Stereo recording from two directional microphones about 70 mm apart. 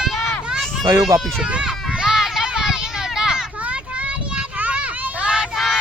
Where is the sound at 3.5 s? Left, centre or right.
Centre.